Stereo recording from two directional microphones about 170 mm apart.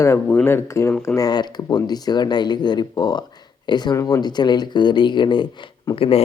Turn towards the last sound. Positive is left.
turn(degrees=35)  # may be behind; listen again after turning